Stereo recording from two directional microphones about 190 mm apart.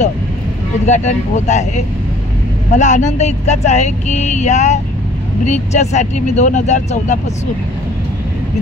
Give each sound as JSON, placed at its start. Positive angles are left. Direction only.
{"t": 0.8, "sound": "speech", "side_deg": 40}
{"t": 2.7, "sound": "speech", "side_deg": 40}